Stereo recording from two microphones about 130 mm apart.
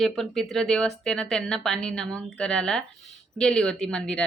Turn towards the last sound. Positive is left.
turn(degrees=5)  # may be behind; listen again after turning